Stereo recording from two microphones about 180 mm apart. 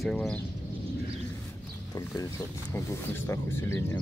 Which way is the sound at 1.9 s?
20° left (ahead or behind).